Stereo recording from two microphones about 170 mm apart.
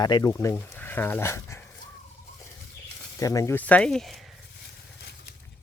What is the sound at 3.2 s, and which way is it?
Speech, 20° left (ahead or behind).